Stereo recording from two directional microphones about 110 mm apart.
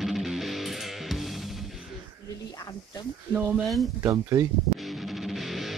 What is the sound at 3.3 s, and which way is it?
Speech, 10° right (ahead or behind).